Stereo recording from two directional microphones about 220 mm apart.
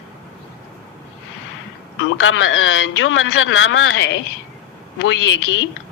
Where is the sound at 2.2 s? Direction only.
60° left (ahead or behind).